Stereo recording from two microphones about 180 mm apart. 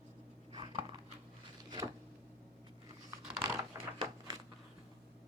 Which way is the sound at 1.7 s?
20° right (ahead or behind).